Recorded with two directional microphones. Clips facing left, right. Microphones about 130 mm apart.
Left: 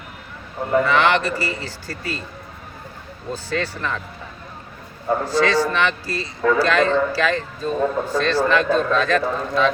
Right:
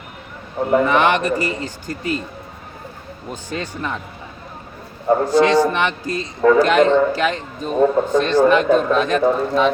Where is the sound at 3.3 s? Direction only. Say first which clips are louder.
Left 2 dB; 15° right (ahead or behind).